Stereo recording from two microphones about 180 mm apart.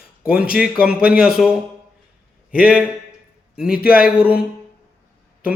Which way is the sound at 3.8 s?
55° left (ahead or behind).